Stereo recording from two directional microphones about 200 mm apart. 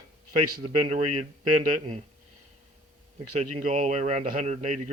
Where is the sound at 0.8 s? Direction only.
30° right (ahead or behind).